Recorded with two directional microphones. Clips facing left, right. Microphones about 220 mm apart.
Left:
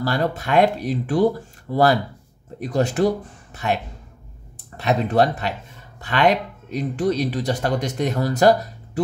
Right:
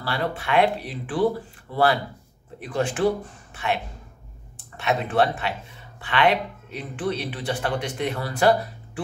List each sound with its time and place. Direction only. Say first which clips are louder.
0.0 s speech: left 5 dB; 45° left (ahead or behind)